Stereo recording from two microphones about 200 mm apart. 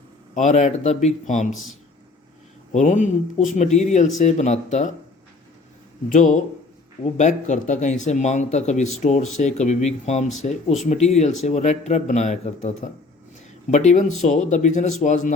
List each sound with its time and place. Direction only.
0.3 s speech: 35° left (ahead or behind)
2.7 s speech: 40° left (ahead or behind)
6.1 s speech: 40° left (ahead or behind)